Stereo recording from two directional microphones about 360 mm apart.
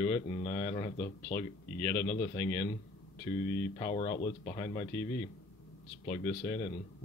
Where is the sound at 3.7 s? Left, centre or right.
Centre.